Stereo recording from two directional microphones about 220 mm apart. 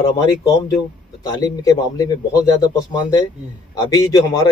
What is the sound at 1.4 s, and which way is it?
Speech, 15° left (ahead or behind).